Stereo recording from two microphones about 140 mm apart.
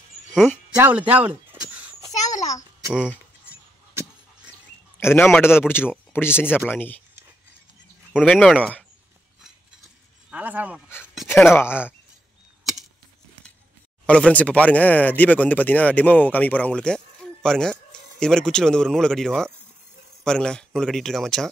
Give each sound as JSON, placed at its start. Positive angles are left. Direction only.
{"t": 0.7, "sound": "a sound", "side_deg": -10}
{"t": 2.9, "sound": "speech", "side_deg": -5}
{"t": 5.0, "sound": "speech", "side_deg": 15}
{"t": 8.1, "sound": "speech", "side_deg": 0}
{"t": 10.3, "sound": "speech", "side_deg": -10}
{"t": 11.4, "sound": "speech", "side_deg": 15}
{"t": 14.0, "sound": "speech", "side_deg": 10}